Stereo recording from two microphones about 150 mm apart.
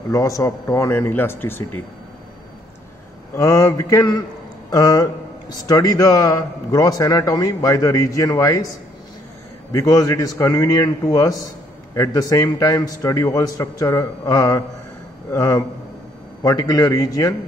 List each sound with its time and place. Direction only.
0.1 s speech: 20° left (ahead or behind)
3.3 s speech: 20° left (ahead or behind)
9.7 s speech: 20° left (ahead or behind)